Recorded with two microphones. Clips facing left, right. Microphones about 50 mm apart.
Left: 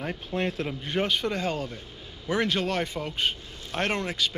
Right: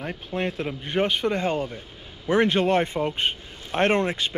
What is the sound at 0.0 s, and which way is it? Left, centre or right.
Speech, centre.